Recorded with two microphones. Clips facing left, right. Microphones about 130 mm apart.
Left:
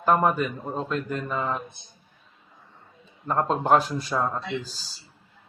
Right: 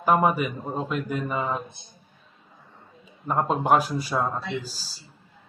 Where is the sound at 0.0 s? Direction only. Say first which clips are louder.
Even; 10° right (ahead or behind).